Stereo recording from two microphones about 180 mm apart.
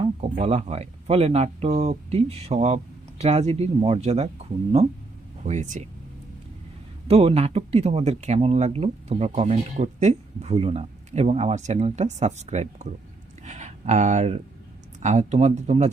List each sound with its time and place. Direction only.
0.0 s speech: 35° right (ahead or behind)
5.4 s speech: 40° right (ahead or behind)
7.1 s speech: 35° right (ahead or behind)
13.4 s a sound: 40° right (ahead or behind)
15.0 s speech: 40° right (ahead or behind)